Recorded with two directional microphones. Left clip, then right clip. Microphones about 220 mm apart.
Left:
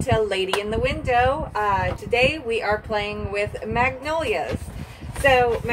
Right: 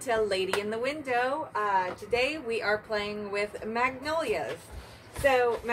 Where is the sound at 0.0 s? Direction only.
20° right (ahead or behind).